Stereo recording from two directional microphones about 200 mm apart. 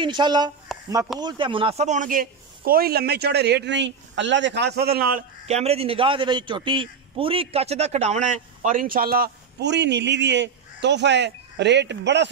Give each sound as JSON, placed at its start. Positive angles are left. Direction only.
{"t": 0.0, "sound": "a man's voice", "side_deg": -20}
{"t": 5.5, "sound": "a man's voice", "side_deg": -30}